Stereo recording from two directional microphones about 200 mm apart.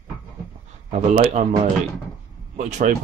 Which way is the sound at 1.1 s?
35° right (ahead or behind).